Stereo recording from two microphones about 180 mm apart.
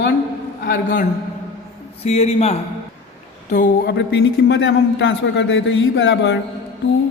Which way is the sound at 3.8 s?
70° left (ahead or behind).